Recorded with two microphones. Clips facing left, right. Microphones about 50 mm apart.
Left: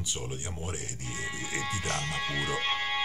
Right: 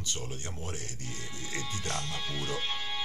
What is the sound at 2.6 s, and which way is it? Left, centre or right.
Music, left.